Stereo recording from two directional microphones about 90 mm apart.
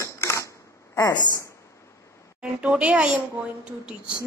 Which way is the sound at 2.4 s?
10° right (ahead or behind).